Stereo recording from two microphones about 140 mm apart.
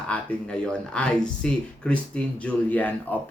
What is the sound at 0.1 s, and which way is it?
Speech, 10° left (ahead or behind).